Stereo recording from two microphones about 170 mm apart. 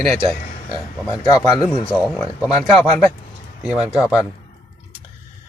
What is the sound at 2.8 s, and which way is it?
Speech, 10° left (ahead or behind).